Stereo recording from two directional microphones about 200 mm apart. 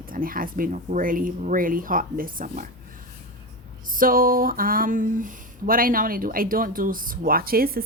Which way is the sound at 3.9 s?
45° right (ahead or behind).